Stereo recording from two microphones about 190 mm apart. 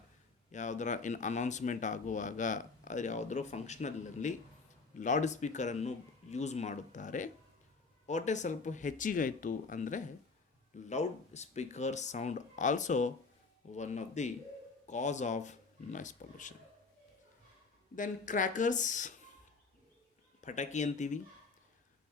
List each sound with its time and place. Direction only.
0.5 s speech: 40° left (ahead or behind)
17.9 s speech: 45° left (ahead or behind)
20.4 s speech: 40° left (ahead or behind)